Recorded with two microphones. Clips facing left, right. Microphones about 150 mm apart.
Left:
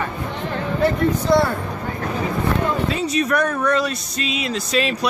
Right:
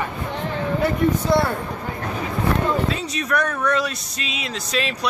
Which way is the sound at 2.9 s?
5° left (ahead or behind).